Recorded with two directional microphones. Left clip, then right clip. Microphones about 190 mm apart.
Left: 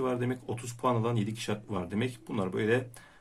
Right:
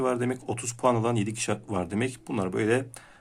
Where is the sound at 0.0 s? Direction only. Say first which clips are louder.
Right 5 dB; 40° right (ahead or behind).